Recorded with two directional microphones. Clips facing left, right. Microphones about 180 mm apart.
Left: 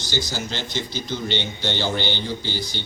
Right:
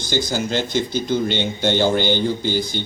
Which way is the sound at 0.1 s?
50° right (ahead or behind).